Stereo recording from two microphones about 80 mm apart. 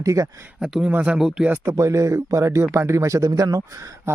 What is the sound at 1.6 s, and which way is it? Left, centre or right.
A man's voice, right.